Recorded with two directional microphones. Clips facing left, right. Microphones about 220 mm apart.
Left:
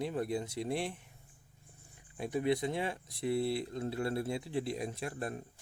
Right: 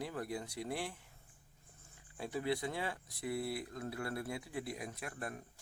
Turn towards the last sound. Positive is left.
turn(degrees=25)  # may be behind; listen again after turning